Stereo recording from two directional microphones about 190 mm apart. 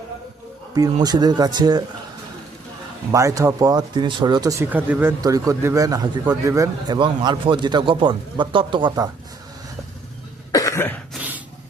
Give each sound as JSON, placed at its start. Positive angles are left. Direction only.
{"t": 0.7, "sound": "speech", "side_deg": -20}
{"t": 3.1, "sound": "speech", "side_deg": -15}
{"t": 10.5, "sound": "cough", "side_deg": 15}
{"t": 11.1, "sound": "burping", "side_deg": -10}